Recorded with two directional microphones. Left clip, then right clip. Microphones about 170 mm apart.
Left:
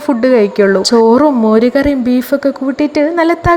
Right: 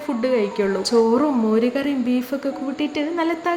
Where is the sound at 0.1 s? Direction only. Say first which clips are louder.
Left 11 dB; 40° left (ahead or behind).